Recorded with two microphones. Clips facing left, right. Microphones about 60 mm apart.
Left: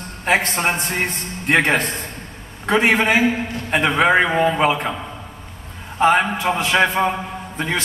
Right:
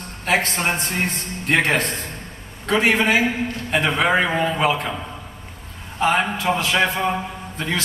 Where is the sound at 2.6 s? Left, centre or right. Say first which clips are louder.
Left 2 dB; centre.